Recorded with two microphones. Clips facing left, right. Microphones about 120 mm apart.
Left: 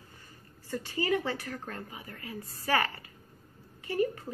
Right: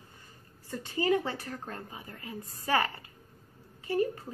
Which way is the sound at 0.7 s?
20° right (ahead or behind).